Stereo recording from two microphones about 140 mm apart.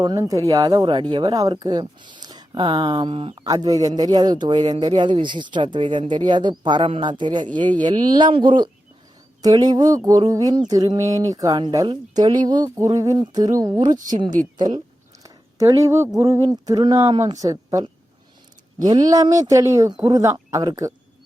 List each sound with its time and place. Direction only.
0.0 s speech: 25° right (ahead or behind)
3.4 s speech: 25° right (ahead or behind)